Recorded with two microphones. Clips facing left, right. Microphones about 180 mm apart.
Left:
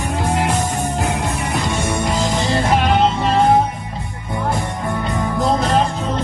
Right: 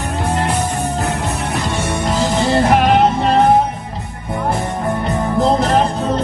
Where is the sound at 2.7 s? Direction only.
60° right (ahead or behind).